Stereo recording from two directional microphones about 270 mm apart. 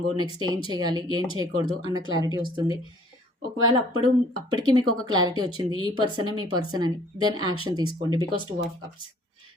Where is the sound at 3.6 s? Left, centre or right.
Right.